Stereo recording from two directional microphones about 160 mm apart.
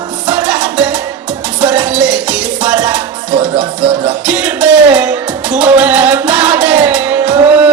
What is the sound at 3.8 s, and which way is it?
Music, 30° right (ahead or behind).